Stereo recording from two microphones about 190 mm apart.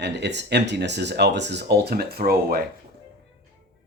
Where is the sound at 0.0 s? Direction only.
65° right (ahead or behind).